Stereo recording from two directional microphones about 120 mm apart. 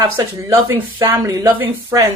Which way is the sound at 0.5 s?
25° right (ahead or behind).